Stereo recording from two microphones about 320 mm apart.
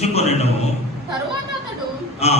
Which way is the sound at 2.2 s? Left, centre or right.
Centre.